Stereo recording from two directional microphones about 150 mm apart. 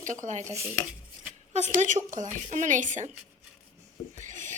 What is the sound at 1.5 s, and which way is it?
Speech, 50° right (ahead or behind).